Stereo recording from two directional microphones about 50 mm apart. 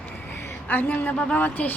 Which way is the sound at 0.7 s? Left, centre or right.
Left.